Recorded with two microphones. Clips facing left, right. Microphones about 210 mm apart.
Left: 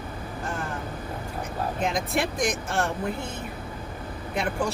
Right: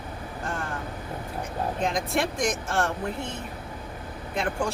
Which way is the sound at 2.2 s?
Centre (ahead or behind).